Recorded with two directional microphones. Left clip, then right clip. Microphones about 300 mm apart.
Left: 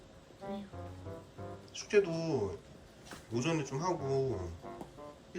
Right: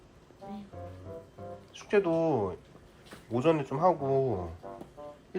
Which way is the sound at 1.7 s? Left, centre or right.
Centre.